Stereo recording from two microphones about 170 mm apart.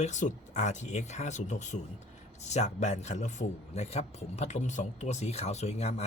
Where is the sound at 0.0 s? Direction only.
45° left (ahead or behind).